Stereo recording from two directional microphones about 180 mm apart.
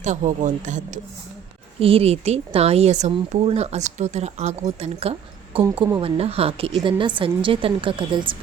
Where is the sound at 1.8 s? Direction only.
30° right (ahead or behind).